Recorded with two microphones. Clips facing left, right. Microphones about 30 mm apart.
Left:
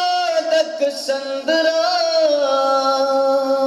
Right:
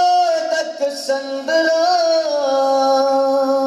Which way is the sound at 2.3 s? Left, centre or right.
Left.